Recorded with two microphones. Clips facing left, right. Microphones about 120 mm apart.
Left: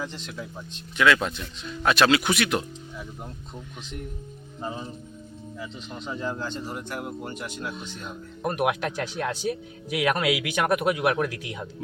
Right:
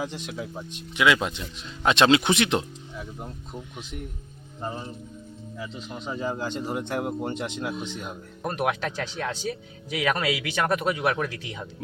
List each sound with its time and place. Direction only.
0.0 s speech: 15° right (ahead or behind)
2.9 s speech: centre (ahead or behind); by 7.7 s 25° right (ahead or behind)
8.4 s speech: 10° left (ahead or behind)